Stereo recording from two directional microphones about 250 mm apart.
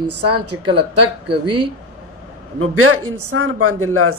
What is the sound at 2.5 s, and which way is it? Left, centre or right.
Speech, right.